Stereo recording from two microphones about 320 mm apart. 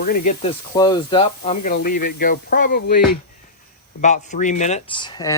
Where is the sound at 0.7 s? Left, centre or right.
Centre.